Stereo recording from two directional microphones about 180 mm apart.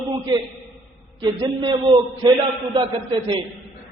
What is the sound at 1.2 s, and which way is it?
A man's voice, 25° right (ahead or behind).